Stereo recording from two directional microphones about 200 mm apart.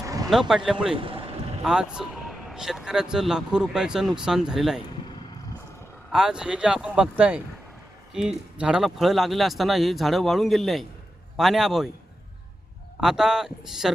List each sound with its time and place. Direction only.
0.0 s vehicle: 15° right (ahead or behind)
0.3 s speech: centre (ahead or behind)
0.9 s speech: 25° right (ahead or behind)
1.6 s speech: 5° right (ahead or behind)
6.1 s speech: 5° right (ahead or behind)
8.5 s speech: 5° right (ahead or behind)
13.0 s speech: centre (ahead or behind)